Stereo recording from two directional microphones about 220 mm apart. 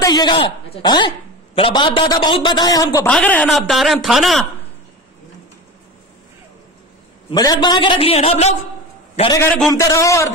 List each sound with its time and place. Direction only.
0.0 s a man's voice: 20° left (ahead or behind); by 4.5 s centre (ahead or behind)
7.2 s a man's voice: 20° left (ahead or behind)
9.7 s a man's voice: 15° left (ahead or behind)